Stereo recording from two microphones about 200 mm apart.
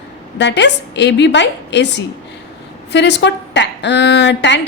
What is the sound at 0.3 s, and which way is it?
A woman's voice, 60° left (ahead or behind).